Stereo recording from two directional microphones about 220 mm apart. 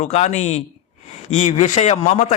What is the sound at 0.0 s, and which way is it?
Speech, 30° left (ahead or behind).